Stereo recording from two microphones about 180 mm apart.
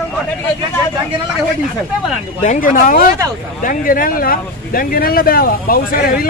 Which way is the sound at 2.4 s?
45° left (ahead or behind).